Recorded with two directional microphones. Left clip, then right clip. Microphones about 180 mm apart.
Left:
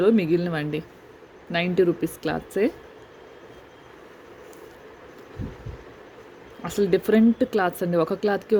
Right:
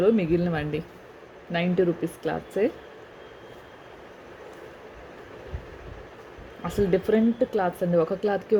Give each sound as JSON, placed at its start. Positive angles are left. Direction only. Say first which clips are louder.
{"t": 0.0, "sound": "speech", "louder": "left 2 dB", "side_deg": 20}
{"t": 6.6, "sound": "speech", "louder": "left 2 dB", "side_deg": 20}